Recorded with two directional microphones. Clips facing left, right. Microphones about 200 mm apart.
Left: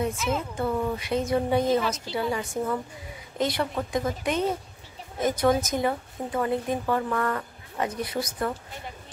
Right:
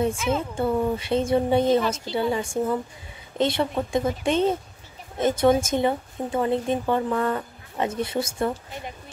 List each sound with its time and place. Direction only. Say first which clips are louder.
0.4 s speech: right 4 dB; 30° right (ahead or behind)